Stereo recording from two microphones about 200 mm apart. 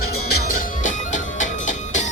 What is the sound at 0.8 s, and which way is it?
Music, 40° left (ahead or behind).